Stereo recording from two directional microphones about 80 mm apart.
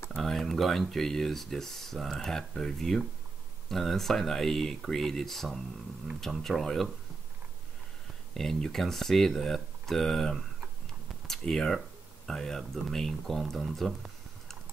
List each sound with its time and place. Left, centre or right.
0.1 s speech: centre
8.4 s speech: centre